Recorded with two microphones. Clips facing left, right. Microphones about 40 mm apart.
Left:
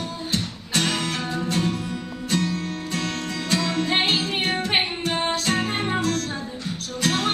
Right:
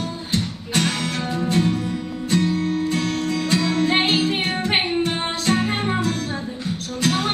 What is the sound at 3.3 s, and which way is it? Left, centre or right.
Music, centre.